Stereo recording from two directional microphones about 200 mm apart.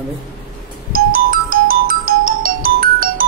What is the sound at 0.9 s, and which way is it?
Ringtone, 45° right (ahead or behind).